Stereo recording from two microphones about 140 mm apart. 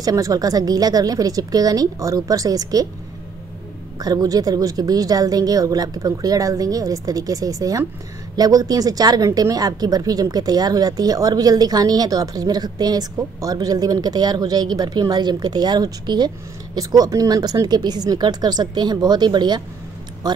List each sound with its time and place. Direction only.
0.0 s speech: 25° right (ahead or behind)
4.0 s speech: 25° right (ahead or behind)